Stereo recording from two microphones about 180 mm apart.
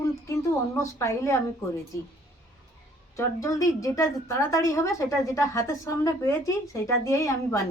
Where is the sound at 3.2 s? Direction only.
15° left (ahead or behind).